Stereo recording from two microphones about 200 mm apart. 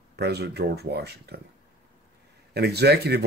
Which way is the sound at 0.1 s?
55° right (ahead or behind).